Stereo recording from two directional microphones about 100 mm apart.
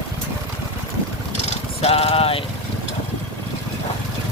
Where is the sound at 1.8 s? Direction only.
80° left.